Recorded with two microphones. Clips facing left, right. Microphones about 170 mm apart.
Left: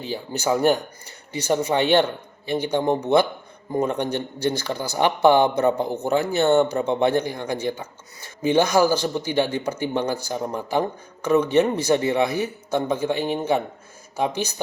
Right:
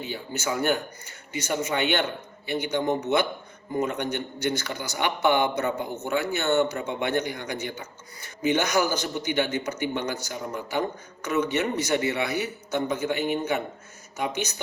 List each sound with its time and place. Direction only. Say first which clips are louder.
0.0 s a man's voice: left 5 dB; 35° left (ahead or behind)